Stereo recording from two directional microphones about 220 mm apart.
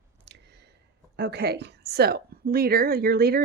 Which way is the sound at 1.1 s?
50° right (ahead or behind).